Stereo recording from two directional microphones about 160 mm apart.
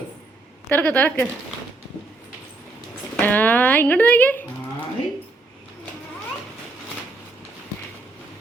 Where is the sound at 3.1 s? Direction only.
10° left (ahead or behind).